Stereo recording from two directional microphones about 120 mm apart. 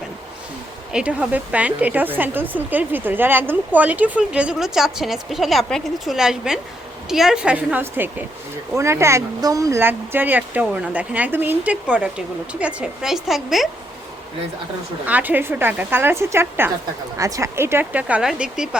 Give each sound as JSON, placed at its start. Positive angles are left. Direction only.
{"t": 0.9, "sound": "speech", "side_deg": -10}
{"t": 15.0, "sound": "speech", "side_deg": -15}